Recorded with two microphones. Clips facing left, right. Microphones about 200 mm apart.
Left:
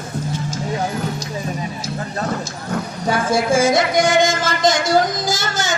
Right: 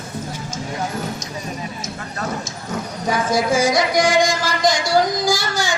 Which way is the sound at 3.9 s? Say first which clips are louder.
Left 1 dB; 25° left (ahead or behind).